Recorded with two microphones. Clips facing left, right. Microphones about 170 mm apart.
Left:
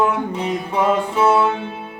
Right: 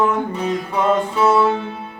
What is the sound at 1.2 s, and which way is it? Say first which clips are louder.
Music: right 2 dB; 25° left (ahead or behind).